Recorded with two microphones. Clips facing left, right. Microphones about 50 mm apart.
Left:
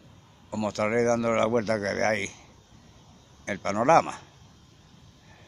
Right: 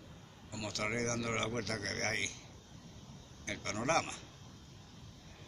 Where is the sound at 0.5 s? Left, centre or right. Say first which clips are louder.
Left 12 dB; left.